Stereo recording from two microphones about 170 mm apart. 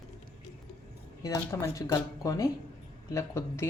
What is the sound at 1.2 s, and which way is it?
Speech, 20° left (ahead or behind).